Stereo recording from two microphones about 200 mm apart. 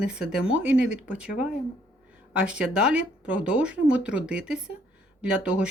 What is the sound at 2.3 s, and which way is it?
Speech, 5° right (ahead or behind).